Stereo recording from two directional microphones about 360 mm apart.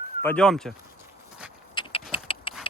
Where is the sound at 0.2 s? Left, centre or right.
Centre.